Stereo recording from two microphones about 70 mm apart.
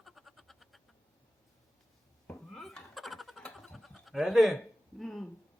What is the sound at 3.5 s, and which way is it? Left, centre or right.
Goat, centre.